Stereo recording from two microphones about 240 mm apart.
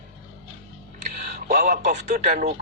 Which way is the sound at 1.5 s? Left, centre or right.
Right.